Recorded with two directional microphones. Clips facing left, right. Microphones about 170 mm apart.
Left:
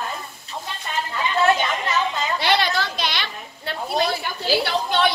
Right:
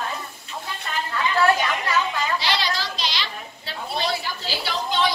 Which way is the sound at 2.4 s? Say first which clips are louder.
Left 5 dB; 55° left (ahead or behind).